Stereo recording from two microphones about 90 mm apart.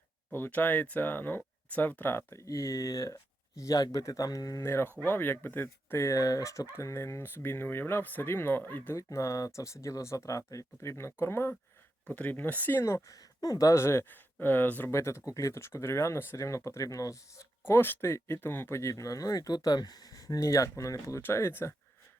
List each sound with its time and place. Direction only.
0.3 s speech: 20° left (ahead or behind)
9.0 s speech: 35° left (ahead or behind); by 12.8 s 20° left (ahead or behind)
12.8 s speech: 35° left (ahead or behind)
17.7 s speech: 25° left (ahead or behind)